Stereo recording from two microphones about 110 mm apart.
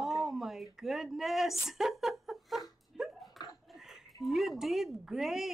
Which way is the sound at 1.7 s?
Centre (ahead or behind).